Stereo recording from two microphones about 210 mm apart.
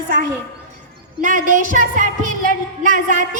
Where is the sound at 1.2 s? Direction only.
40° right (ahead or behind).